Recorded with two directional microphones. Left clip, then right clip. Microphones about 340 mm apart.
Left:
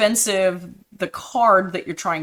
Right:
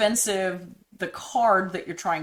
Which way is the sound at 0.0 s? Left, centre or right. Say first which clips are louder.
Left 6 dB; left.